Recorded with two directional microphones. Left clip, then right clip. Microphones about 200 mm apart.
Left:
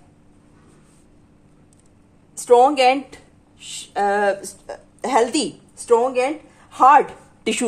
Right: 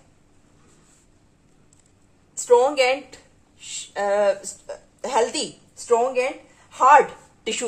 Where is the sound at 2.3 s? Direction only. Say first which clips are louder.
Left 3 dB; 40° left (ahead or behind).